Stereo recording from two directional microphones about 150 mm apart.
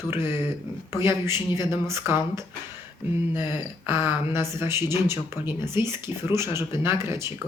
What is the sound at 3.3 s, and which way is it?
Speech, 30° left (ahead or behind).